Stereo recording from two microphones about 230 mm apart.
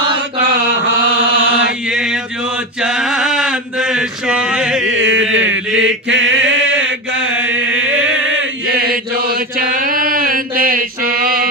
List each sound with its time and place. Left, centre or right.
1.9 s chant: centre
2.8 s mantra: centre
4.8 s mantra: right
6.8 s chant: right
8.6 s chant: right